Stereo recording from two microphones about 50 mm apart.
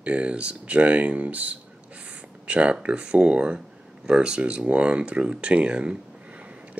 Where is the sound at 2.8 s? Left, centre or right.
Right.